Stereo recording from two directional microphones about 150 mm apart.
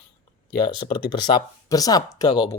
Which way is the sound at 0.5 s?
30° left (ahead or behind).